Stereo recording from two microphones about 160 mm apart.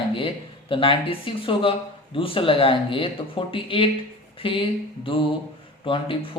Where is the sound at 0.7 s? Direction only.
35° left (ahead or behind).